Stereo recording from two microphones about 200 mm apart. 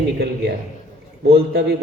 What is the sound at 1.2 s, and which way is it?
Speech, 55° right (ahead or behind).